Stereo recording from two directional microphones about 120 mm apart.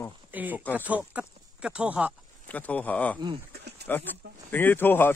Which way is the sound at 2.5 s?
10° left (ahead or behind).